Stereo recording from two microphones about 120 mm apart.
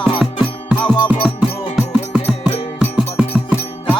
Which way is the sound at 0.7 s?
10° right (ahead or behind).